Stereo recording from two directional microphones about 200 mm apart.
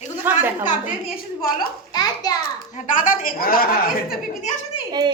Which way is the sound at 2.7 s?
40° left (ahead or behind).